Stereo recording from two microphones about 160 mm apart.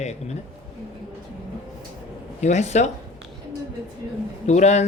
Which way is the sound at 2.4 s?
45° left (ahead or behind).